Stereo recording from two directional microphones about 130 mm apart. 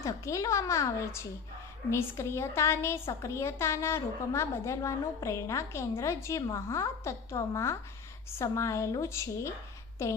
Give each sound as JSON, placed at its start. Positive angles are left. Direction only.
{"t": 0.0, "sound": "a woman's voice", "side_deg": 25}